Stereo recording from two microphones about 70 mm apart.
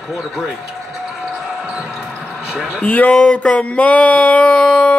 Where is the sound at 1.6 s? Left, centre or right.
Centre.